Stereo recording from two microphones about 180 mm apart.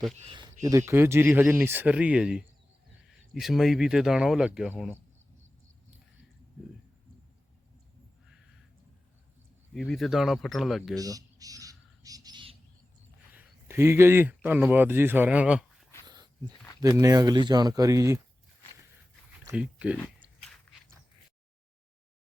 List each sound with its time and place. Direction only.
0.3 s a sound: 25° right (ahead or behind)
0.6 s speech: 15° right (ahead or behind)
9.7 s speech: centre (ahead or behind)
10.9 s bird: 20° right (ahead or behind)
13.3 s speech: 10° right (ahead or behind)
16.0 s dog: 25° right (ahead or behind)
16.8 s speech: 20° right (ahead or behind)
19.5 s speech: 5° right (ahead or behind)